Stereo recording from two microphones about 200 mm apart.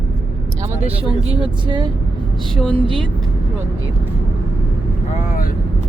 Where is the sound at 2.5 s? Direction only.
5° left (ahead or behind).